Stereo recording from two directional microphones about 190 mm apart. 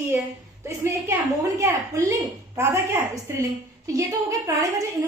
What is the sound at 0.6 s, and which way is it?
A woman's voice, 15° right (ahead or behind).